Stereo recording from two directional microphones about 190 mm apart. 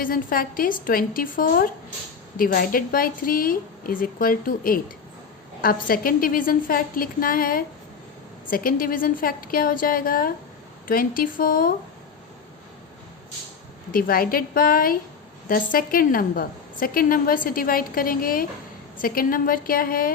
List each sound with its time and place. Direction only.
0.0 s a woman's voice: 50° left (ahead or behind)
13.9 s a woman's voice: 50° left (ahead or behind)